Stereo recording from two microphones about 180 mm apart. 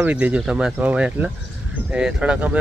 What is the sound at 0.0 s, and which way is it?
Speech, 5° right (ahead or behind).